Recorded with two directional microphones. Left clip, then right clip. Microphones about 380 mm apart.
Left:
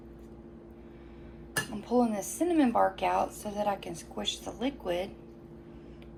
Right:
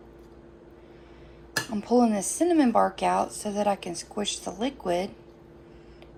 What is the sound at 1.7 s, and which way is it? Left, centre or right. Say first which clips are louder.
A woman's voice: right 6 dB; centre.